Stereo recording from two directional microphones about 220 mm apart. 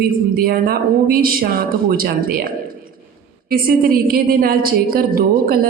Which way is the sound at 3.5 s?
40° right (ahead or behind).